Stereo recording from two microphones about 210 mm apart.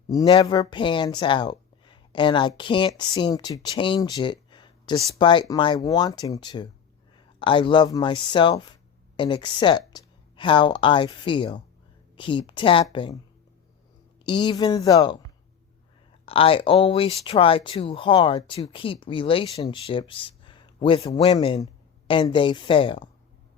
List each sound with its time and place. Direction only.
0.3 s speech: 25° left (ahead or behind)
14.3 s speech: 20° left (ahead or behind)
16.2 s speech: 25° left (ahead or behind)